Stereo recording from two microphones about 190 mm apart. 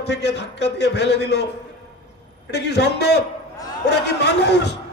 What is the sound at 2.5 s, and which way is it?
A man's voice, 60° left (ahead or behind).